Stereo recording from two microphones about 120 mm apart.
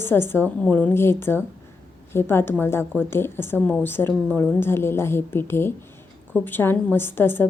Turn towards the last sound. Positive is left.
turn(degrees=20)  # may be behind; listen again after turning